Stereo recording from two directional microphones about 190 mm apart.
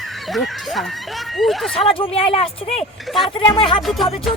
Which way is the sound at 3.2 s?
25° left (ahead or behind).